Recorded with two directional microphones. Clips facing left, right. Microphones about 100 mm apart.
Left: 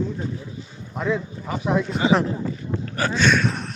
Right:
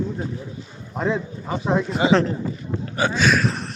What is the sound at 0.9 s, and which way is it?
Speech, 35° right (ahead or behind).